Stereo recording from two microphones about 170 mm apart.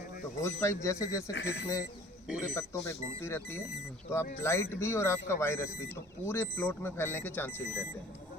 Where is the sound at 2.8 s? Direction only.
15° left (ahead or behind).